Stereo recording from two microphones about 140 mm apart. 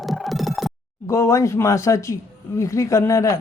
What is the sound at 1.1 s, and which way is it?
Speech, 20° left (ahead or behind).